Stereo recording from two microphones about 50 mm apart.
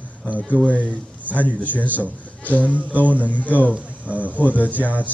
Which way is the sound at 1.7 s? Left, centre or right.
Right.